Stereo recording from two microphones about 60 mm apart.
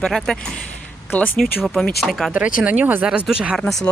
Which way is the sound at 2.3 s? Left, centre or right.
Centre.